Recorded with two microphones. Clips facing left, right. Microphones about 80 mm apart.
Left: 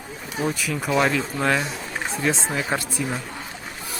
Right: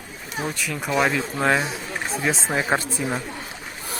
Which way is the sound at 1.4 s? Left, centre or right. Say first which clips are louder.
Right 2 dB; centre.